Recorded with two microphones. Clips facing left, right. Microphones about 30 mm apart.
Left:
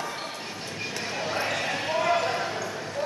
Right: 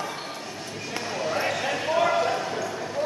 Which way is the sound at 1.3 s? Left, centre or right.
Centre.